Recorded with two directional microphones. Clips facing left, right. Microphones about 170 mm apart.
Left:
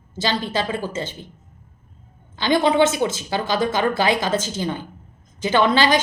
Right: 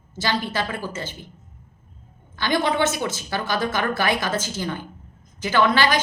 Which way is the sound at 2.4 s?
20° left (ahead or behind).